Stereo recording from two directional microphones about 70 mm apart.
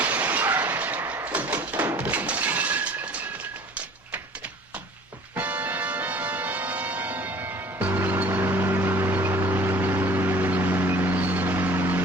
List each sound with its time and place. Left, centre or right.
0.0 s a sound: right
2.0 s breaking: right
5.4 s music: right